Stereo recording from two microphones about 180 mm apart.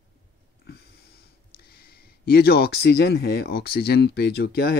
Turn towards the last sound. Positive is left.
turn(degrees=60)  # may be behind; listen again after turning